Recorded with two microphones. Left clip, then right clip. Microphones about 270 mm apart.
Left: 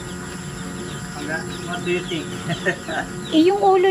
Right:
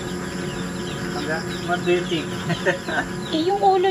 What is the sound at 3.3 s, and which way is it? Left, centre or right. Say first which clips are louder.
Speech: left 3 dB; centre.